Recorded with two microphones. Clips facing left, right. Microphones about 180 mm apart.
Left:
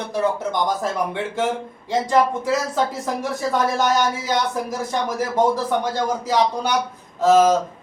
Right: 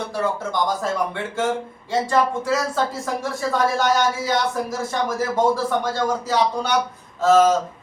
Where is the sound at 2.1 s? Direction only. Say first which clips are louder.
Left 2 dB; 15° left (ahead or behind).